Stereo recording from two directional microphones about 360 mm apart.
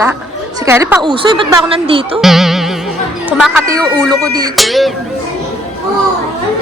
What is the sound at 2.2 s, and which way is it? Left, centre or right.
Music, centre.